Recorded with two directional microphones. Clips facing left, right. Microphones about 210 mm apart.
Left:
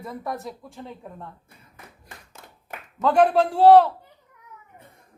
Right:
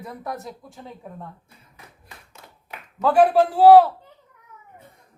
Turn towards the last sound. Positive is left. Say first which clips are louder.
# right 2 dB
turn(degrees=-5)  # may be behind; listen again after turning